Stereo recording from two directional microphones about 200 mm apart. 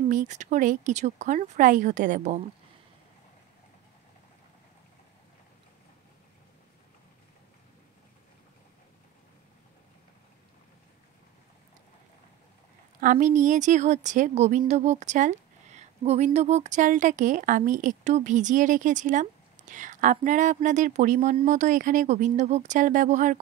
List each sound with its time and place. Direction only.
0.1 s a woman's voice: 40° right (ahead or behind)
13.0 s a woman's voice: 40° right (ahead or behind)